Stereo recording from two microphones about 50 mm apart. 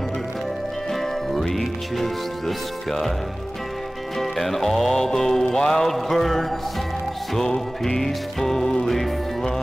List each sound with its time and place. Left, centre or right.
1.5 s music: centre
4.2 s music: centre